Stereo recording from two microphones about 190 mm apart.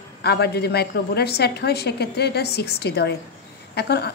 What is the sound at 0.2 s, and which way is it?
A woman's voice, 60° left (ahead or behind).